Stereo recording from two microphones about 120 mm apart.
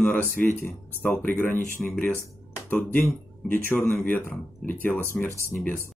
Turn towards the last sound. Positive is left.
turn(degrees=15)  # may be behind; listen again after turning